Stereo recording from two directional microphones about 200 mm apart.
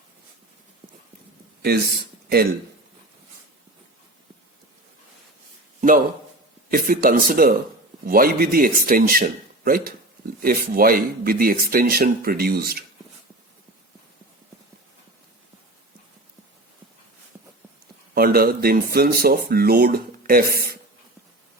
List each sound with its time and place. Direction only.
1.6 s speech: 50° right (ahead or behind)
6.7 s speech: 45° right (ahead or behind)
17.3 s a sound: 10° right (ahead or behind)
18.1 s speech: 45° right (ahead or behind)